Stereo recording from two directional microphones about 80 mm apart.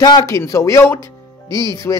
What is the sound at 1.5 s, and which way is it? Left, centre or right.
Speech, right.